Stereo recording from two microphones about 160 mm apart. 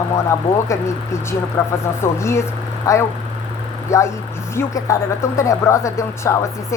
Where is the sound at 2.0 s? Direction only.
15° left (ahead or behind).